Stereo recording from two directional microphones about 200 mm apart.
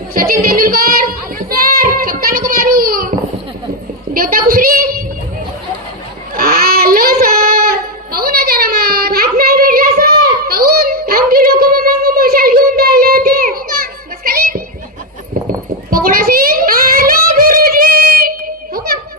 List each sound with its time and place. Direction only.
0.1 s child singing: 45° right (ahead or behind)
4.1 s a sound: 45° right (ahead or behind)
6.3 s child singing: 50° right (ahead or behind)
14.3 s music: 45° right (ahead or behind)
15.9 s child singing: 45° right (ahead or behind)